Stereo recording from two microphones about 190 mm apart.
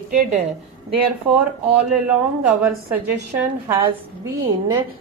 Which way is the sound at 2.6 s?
10° right (ahead or behind).